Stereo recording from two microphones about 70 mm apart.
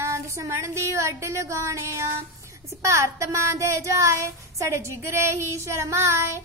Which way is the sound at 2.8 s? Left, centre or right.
Right.